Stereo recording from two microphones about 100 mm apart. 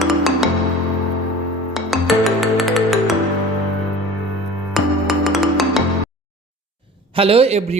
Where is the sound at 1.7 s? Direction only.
Centre (ahead or behind).